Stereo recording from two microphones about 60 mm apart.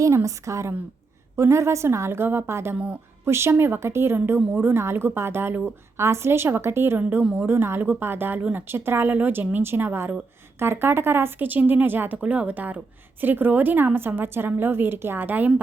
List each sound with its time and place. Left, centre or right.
0.0 s a woman's voice: right
2.7 s a woman's voice: right
3.2 s a woman's voice: right
3.5 s speech: right
3.8 s a woman's voice: right